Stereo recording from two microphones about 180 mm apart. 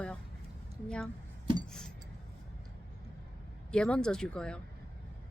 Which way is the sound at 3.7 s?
5° left (ahead or behind).